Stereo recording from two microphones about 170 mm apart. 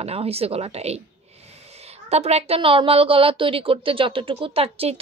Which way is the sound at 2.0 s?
40° right (ahead or behind).